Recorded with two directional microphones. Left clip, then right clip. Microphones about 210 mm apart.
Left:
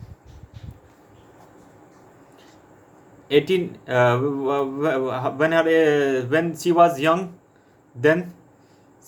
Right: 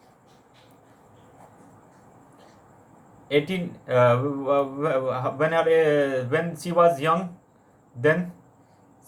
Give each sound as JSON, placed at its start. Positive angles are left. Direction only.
{"t": 3.2, "sound": "a man's voice", "side_deg": 40}